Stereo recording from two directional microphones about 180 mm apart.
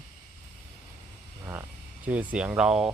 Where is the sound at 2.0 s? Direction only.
5° right (ahead or behind).